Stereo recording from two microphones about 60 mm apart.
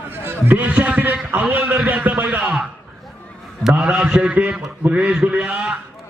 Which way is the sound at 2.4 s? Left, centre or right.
Centre.